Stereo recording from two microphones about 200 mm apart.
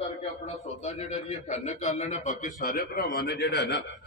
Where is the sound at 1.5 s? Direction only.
35° left (ahead or behind); by 3.7 s 55° left (ahead or behind).